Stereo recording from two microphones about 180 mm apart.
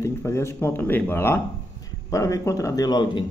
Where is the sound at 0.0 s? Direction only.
15° left (ahead or behind).